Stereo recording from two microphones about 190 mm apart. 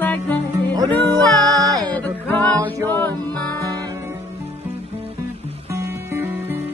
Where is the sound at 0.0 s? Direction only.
10° left (ahead or behind).